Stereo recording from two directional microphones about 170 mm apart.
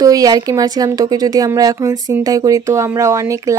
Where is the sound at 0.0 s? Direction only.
20° right (ahead or behind).